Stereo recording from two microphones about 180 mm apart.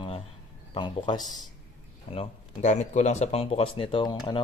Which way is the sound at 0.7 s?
25° left (ahead or behind).